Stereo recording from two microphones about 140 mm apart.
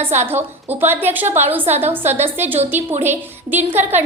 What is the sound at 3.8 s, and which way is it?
Speech, 55° right (ahead or behind).